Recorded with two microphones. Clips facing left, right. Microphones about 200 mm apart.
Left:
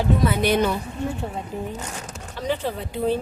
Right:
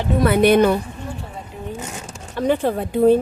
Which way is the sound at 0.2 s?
60° right (ahead or behind).